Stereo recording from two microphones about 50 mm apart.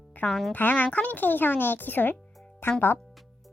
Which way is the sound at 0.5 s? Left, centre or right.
Left.